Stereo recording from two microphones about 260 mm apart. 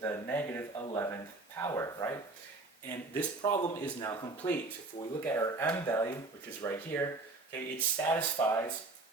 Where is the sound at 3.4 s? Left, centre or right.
Centre.